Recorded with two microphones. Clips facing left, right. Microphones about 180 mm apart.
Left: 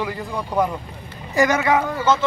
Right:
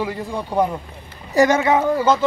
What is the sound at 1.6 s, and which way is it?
Speech, 25° right (ahead or behind).